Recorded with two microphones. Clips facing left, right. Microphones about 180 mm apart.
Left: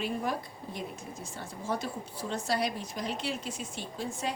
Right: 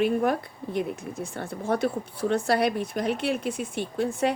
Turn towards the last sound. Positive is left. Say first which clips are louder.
# right 10 dB
turn(degrees=-60)  # may be behind; listen again after turning